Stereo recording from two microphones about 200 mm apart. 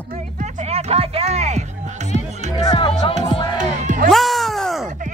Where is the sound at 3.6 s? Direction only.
35° right (ahead or behind).